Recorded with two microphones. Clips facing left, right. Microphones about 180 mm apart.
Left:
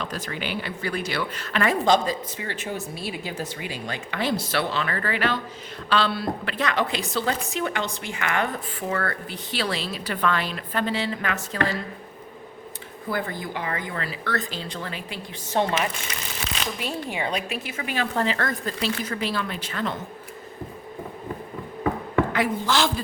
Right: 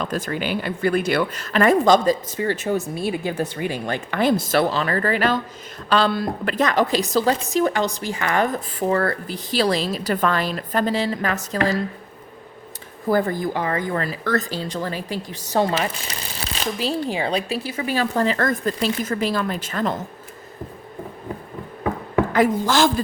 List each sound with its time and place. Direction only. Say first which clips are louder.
0.0 s a woman's voice: right 6 dB; 45° right (ahead or behind)
13.1 s speech: right 9 dB; 45° right (ahead or behind)
22.3 s a woman's voice: right 5 dB; 45° right (ahead or behind)